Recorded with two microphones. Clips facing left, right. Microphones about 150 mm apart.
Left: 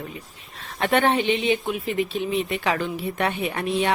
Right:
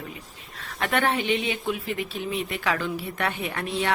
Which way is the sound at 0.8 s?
25° left (ahead or behind).